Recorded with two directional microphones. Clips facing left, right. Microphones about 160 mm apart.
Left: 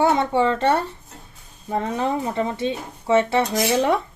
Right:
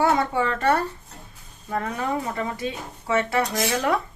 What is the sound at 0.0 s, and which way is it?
Speech, 25° left (ahead or behind).